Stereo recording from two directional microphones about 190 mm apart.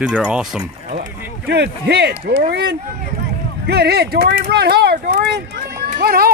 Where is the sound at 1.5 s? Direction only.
60° right (ahead or behind).